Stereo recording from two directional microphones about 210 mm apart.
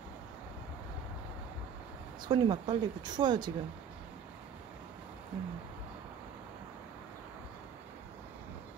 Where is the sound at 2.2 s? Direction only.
20° right (ahead or behind).